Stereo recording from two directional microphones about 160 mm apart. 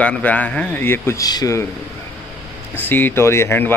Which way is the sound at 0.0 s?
10° left (ahead or behind).